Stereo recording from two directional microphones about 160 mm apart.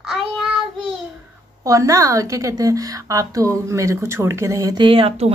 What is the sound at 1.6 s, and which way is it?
A woman's voice, 20° right (ahead or behind).